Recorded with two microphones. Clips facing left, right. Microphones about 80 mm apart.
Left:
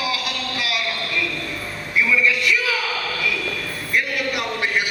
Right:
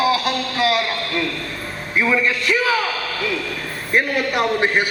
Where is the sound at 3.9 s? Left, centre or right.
Right.